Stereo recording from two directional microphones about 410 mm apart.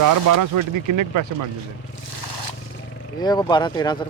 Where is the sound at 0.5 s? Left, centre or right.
Right.